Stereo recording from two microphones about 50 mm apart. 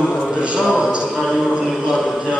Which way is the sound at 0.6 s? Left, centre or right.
Centre.